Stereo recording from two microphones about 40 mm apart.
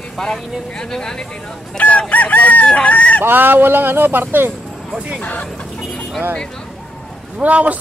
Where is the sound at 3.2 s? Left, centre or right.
Right.